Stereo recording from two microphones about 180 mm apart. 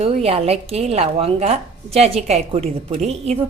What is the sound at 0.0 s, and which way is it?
A woman's voice, 35° right (ahead or behind).